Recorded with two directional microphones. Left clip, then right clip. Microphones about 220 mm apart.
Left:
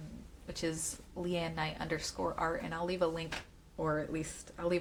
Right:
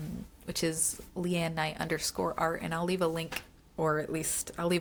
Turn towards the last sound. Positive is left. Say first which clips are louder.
# right 3 dB
turn(degrees=-50)  # may be behind; listen again after turning